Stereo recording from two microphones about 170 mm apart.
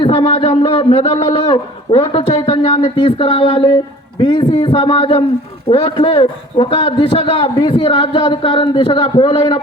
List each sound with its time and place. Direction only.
0.0 s a man's voice: 35° left (ahead or behind)